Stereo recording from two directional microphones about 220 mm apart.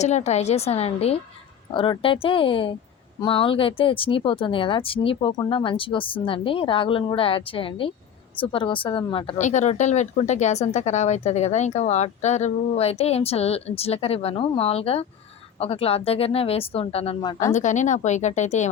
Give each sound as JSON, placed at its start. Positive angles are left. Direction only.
{"t": 0.0, "sound": "a woman's voice", "side_deg": 30}
{"t": 17.4, "sound": "a woman's voice", "side_deg": 35}